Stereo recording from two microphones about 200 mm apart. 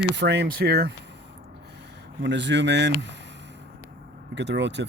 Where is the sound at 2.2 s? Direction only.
60° right (ahead or behind).